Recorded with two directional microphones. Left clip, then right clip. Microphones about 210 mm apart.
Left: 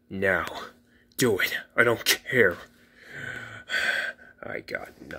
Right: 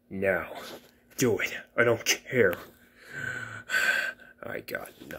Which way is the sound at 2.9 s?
5° left (ahead or behind).